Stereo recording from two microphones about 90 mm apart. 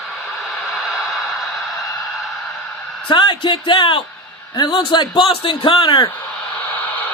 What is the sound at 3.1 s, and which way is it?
Speech, 60° left (ahead or behind).